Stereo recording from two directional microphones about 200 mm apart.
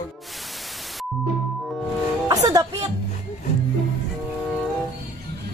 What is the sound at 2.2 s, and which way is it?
Speech, 15° right (ahead or behind).